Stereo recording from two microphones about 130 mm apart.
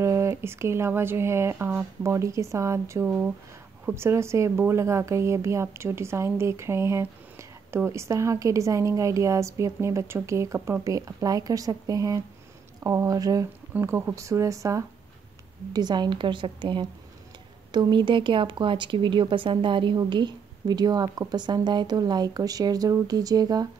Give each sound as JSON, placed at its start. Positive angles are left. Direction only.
{"t": 0.0, "sound": "speech", "side_deg": -20}